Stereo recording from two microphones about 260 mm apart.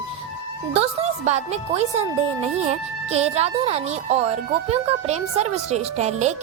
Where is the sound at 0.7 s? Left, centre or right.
Right.